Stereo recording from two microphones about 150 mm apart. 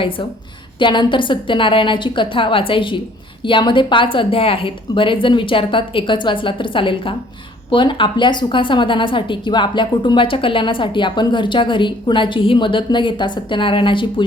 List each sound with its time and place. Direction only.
0.8 s a woman's voice: 30° left (ahead or behind)